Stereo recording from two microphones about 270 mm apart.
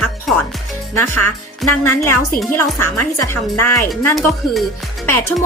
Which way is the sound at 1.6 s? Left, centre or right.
Centre.